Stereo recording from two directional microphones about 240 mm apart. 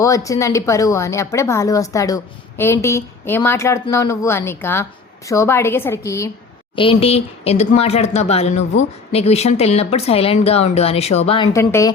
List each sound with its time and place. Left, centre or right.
0.0 s speech: centre
6.7 s speech: left
11.5 s speech: centre